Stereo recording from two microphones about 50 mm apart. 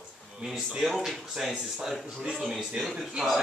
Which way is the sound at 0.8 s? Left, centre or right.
Centre.